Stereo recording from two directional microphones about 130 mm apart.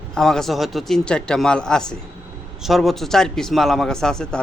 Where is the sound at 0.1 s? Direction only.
5° left (ahead or behind).